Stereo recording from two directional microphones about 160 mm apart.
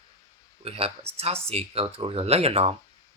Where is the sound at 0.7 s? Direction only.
40° right (ahead or behind).